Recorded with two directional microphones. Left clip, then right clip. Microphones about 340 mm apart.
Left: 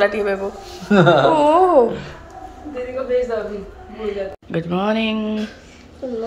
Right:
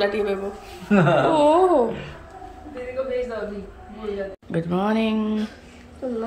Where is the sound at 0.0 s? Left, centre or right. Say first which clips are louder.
Left 5 dB; centre.